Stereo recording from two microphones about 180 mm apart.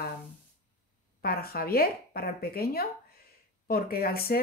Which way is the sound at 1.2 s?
55° left (ahead or behind).